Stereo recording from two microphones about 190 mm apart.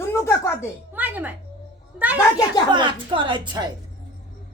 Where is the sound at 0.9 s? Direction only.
10° right (ahead or behind).